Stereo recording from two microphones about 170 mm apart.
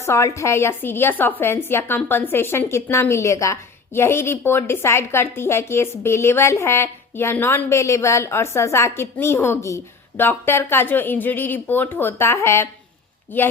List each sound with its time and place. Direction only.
0.0 s a woman's voice: 15° left (ahead or behind)